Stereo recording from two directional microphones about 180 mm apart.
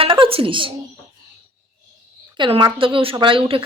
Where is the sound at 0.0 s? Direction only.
30° right (ahead or behind).